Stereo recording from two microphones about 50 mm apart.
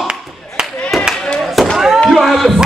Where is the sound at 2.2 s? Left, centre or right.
Centre.